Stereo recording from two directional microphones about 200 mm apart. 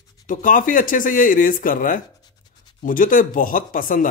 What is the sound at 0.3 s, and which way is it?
A man's voice, 40° left (ahead or behind).